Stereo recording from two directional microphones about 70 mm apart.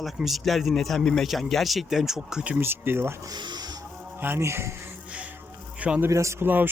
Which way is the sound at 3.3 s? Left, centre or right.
Right.